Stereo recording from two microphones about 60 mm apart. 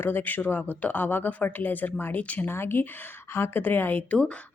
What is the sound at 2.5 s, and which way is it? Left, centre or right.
A woman's voice, left.